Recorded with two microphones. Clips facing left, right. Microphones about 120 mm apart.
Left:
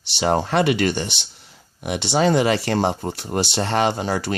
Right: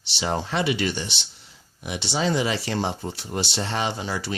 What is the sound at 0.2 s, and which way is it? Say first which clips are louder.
Speech: left 7 dB; 55° left (ahead or behind).